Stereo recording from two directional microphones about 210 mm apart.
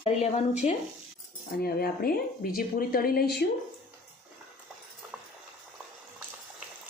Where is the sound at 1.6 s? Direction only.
45° left (ahead or behind).